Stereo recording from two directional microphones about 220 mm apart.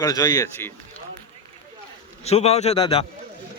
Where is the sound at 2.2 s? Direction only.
30° left (ahead or behind).